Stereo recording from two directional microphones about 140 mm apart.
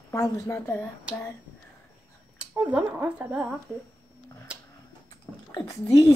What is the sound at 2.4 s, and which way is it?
Speech, 10° right (ahead or behind).